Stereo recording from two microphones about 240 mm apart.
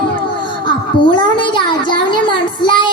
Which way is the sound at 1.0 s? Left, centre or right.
Centre.